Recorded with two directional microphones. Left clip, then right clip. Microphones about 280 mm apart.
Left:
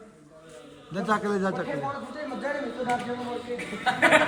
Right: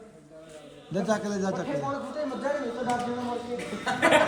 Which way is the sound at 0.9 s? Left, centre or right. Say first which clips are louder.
Left 2 dB; centre.